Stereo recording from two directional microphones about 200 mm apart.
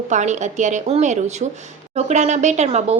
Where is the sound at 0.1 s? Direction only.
35° right (ahead or behind).